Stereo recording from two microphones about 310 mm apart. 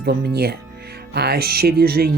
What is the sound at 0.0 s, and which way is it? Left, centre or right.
Speech, right.